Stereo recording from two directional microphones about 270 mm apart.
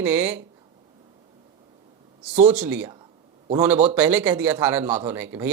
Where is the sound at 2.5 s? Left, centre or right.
Centre.